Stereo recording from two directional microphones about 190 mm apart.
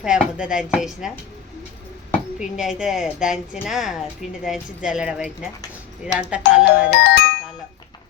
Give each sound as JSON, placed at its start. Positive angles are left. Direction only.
{"t": 0.0, "sound": "speech", "side_deg": -5}
{"t": 2.4, "sound": "speech", "side_deg": -5}
{"t": 6.7, "sound": "music", "side_deg": 60}